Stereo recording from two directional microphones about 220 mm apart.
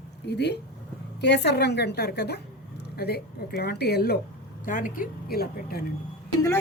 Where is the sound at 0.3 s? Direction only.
50° left (ahead or behind).